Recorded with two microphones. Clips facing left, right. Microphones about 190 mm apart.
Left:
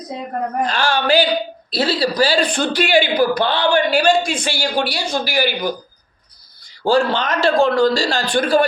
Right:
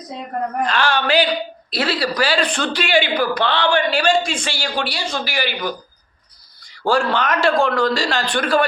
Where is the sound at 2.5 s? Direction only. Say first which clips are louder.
Left 3 dB; 10° left (ahead or behind).